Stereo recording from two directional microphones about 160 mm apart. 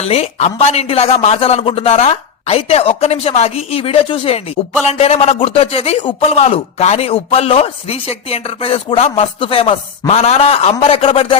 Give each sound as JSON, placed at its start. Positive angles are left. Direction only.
{"t": 0.0, "sound": "speech", "side_deg": 40}